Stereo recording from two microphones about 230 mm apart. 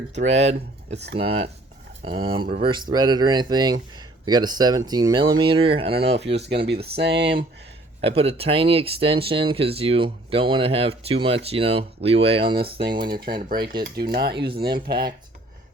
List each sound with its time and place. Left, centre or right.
0.3 s speech: right
6.1 s speech: right
8.0 s speech: right
13.2 s speech: right